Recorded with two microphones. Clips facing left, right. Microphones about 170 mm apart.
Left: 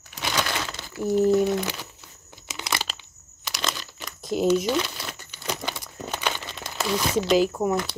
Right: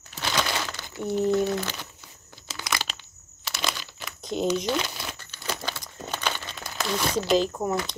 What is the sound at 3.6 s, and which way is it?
Crumpling, centre (ahead or behind).